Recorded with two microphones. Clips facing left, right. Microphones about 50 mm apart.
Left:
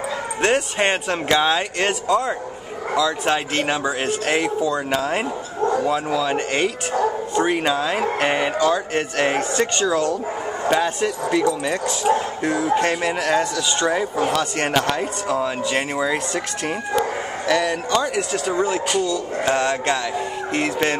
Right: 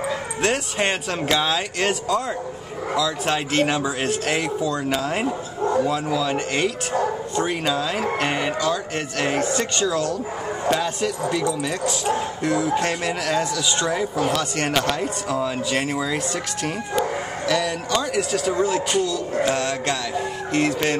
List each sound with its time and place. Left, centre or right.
0.4 s speech: centre
17.5 s speech: centre